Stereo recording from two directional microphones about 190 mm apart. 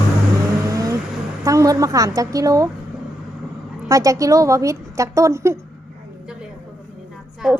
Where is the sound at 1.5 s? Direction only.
15° right (ahead or behind).